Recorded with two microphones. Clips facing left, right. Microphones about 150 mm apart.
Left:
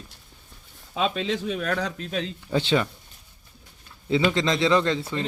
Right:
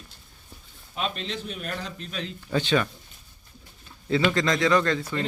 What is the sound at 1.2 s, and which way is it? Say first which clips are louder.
Speech: left 7 dB; 90° left.